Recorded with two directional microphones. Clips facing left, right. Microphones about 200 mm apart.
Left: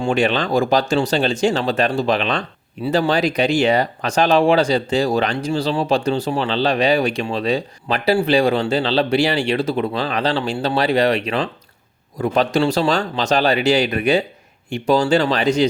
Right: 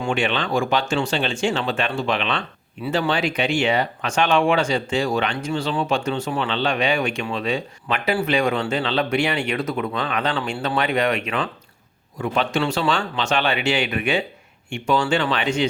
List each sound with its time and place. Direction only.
0.0 s speech: 40° left (ahead or behind)